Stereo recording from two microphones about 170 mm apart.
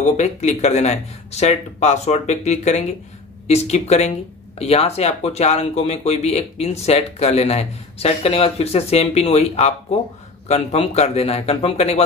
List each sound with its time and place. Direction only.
0.2 s speech: 40° left (ahead or behind)